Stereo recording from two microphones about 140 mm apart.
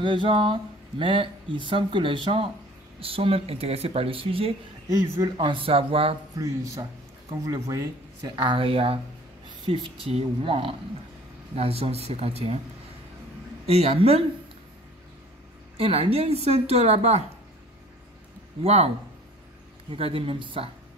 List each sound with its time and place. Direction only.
0.0 s speech: 35° right (ahead or behind)
4.8 s speech: 30° right (ahead or behind)
6.3 s speech: 25° right (ahead or behind)
8.4 s speech: 35° right (ahead or behind)
13.7 s speech: 45° right (ahead or behind)
15.8 s speech: 45° right (ahead or behind)
18.6 s speech: 50° right (ahead or behind)
19.9 s speech: 40° right (ahead or behind)